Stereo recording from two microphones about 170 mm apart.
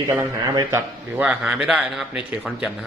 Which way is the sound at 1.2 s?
5° right (ahead or behind).